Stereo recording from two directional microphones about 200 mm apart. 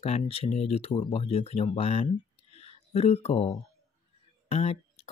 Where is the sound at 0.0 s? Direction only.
30° left (ahead or behind).